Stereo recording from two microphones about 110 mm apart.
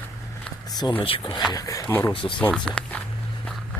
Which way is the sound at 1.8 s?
20° left (ahead or behind).